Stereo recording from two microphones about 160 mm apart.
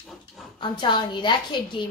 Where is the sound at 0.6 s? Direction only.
30° left (ahead or behind).